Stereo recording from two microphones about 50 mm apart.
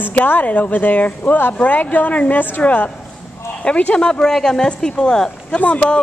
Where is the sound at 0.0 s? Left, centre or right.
Left; by 5.6 s centre.